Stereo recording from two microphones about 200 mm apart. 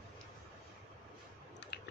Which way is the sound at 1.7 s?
55° left (ahead or behind).